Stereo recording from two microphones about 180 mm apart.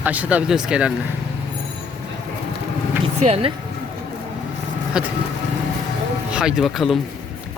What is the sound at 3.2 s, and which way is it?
Speech, 35° right (ahead or behind).